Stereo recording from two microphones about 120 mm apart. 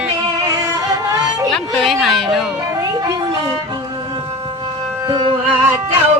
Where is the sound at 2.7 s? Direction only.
30° right (ahead or behind).